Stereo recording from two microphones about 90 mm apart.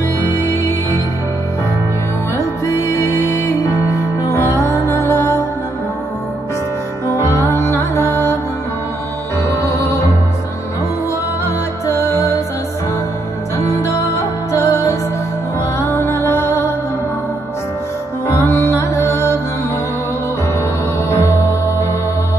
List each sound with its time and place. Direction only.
2.3 s music: 30° left (ahead or behind)
7.1 s music: 30° left (ahead or behind)
9.6 s music: 30° left (ahead or behind)
11.4 s music: 30° left (ahead or behind)
13.6 s music: 30° left (ahead or behind)
18.2 s music: 30° left (ahead or behind)
21.1 s music: 30° left (ahead or behind)